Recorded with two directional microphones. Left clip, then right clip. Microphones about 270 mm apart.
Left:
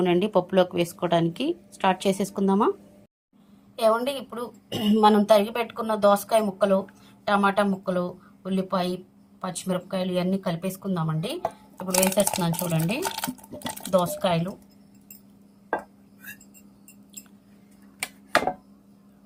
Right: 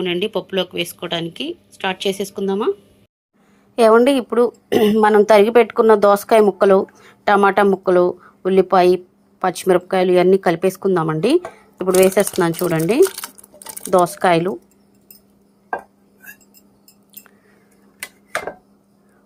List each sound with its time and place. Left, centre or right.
0.0 s speech: centre
3.9 s a woman's voice: right
13.9 s a woman's voice: right